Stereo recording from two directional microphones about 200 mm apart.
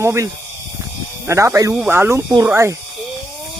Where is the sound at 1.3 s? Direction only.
15° right (ahead or behind).